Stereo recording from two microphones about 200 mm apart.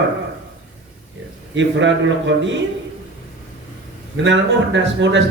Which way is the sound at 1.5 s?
65° right (ahead or behind).